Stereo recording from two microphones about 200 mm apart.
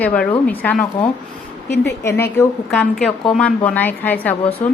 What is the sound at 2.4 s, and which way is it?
A woman's voice, 5° left (ahead or behind).